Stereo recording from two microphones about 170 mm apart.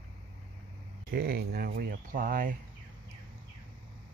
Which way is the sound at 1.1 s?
65° right (ahead or behind).